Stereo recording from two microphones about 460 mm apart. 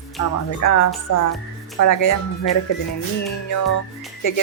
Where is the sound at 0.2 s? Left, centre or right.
Left.